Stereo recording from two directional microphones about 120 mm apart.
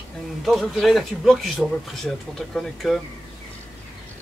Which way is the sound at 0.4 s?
Centre (ahead or behind).